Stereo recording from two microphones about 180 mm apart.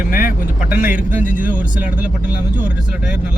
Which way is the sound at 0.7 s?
10° right (ahead or behind).